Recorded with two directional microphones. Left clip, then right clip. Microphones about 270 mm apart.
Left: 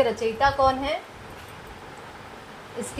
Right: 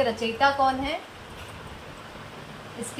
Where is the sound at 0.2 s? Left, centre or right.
Left.